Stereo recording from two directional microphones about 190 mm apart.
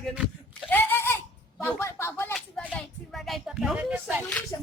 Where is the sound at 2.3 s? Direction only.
5° left (ahead or behind).